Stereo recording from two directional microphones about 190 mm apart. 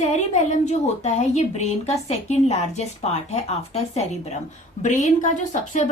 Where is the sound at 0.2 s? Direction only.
35° left (ahead or behind).